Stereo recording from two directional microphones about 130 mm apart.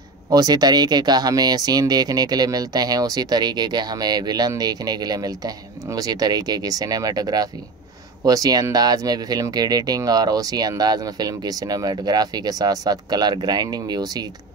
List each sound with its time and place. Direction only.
0.3 s speech: 30° right (ahead or behind)